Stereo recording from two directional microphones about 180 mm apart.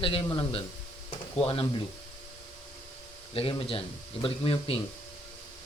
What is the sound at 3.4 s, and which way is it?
Speech, 30° left (ahead or behind).